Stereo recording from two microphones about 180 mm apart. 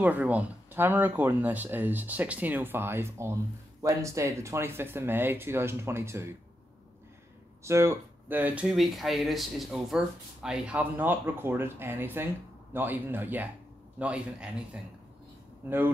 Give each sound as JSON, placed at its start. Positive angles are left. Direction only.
{"t": 0.0, "sound": "speech", "side_deg": -10}
{"t": 7.6, "sound": "speech", "side_deg": -15}